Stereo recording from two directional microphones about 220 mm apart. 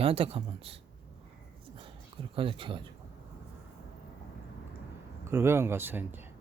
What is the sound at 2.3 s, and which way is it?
Speech, 25° right (ahead or behind).